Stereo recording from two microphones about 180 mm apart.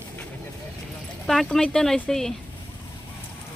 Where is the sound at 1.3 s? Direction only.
Centre (ahead or behind).